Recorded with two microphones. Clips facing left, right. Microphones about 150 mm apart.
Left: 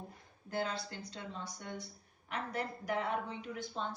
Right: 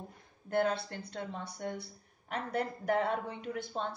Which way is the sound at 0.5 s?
55° right (ahead or behind).